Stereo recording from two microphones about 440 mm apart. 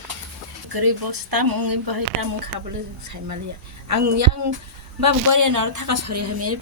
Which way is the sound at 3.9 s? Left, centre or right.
Right.